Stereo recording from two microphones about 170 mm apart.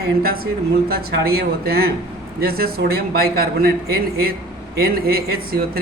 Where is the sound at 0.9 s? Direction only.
65° right (ahead or behind).